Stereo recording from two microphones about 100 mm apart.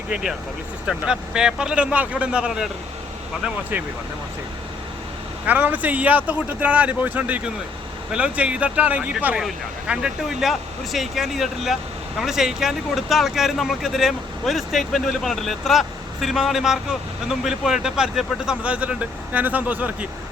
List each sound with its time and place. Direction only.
0.1 s speech: 5° right (ahead or behind)
5.5 s speech: 15° right (ahead or behind)